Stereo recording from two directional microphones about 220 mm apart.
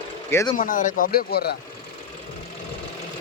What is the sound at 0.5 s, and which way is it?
Speech, 40° left (ahead or behind).